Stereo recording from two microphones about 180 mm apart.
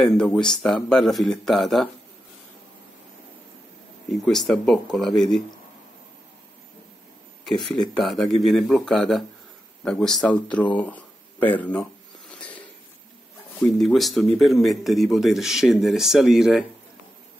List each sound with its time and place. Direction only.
0.0 s speech: 5° left (ahead or behind)
4.1 s speech: centre (ahead or behind)
7.9 s speech: centre (ahead or behind)